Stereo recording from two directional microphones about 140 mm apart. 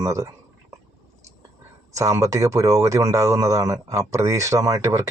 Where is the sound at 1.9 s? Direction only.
25° right (ahead or behind).